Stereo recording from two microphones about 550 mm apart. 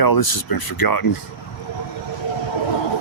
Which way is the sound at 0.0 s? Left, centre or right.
Left.